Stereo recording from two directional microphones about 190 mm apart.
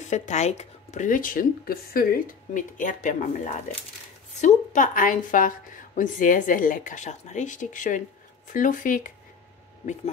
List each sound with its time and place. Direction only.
0.1 s a woman's voice: 40° left (ahead or behind)